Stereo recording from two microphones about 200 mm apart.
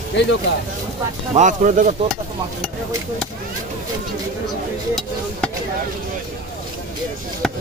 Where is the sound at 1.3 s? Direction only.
40° right (ahead or behind).